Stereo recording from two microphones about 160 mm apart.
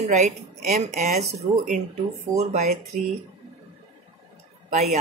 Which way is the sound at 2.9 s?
60° right (ahead or behind).